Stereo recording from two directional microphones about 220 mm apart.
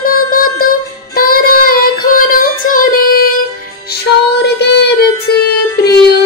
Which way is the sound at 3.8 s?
50° left (ahead or behind).